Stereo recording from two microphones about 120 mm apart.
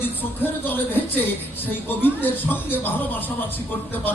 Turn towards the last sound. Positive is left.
turn(degrees=15)  # may be behind; listen again after turning